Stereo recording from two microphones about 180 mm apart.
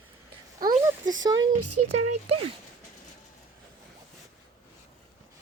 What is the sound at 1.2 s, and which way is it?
Speech, 20° right (ahead or behind).